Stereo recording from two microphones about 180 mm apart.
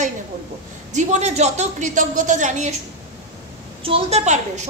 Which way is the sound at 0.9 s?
40° right (ahead or behind).